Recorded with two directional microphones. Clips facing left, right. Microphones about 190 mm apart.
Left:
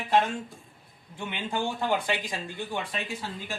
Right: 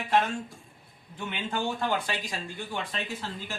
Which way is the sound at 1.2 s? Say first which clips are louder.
Left 1 dB; 15° left (ahead or behind).